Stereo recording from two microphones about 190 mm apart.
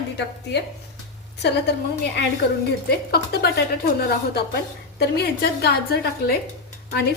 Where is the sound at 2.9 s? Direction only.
55° left (ahead or behind).